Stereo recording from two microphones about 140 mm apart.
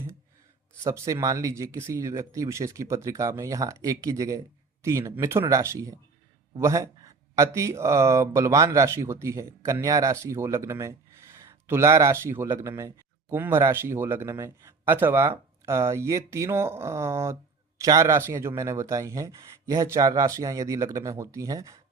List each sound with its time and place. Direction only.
0.9 s speech: 20° right (ahead or behind)